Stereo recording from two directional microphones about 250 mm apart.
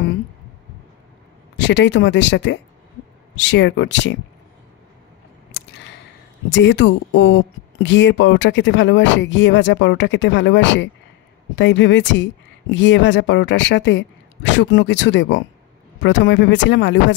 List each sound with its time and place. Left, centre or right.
1.6 s speech: left
6.5 s speech: left